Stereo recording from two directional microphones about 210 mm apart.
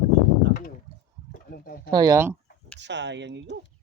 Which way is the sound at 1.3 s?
45° left (ahead or behind).